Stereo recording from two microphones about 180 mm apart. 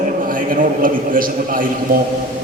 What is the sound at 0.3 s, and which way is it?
A man's voice, 50° right (ahead or behind).